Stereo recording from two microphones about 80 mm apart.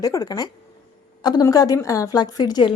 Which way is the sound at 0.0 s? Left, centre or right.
Left.